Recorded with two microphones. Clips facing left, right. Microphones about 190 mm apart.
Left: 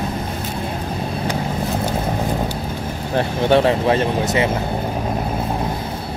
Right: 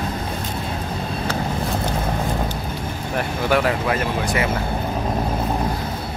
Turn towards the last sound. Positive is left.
turn(degrees=25)  # may be behind; listen again after turning